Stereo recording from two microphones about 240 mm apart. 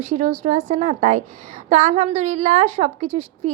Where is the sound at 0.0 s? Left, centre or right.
Right.